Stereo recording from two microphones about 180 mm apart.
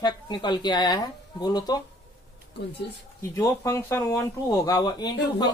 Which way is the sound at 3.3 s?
15° left (ahead or behind).